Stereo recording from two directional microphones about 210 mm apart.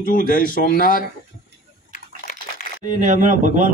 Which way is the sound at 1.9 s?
35° left (ahead or behind).